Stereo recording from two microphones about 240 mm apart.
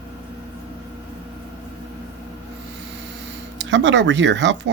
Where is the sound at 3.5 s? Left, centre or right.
Right.